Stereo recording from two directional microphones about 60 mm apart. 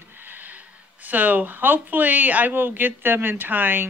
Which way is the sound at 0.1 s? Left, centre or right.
Right.